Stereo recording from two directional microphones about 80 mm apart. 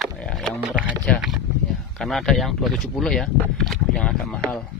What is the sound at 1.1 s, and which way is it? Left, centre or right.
Speech, centre.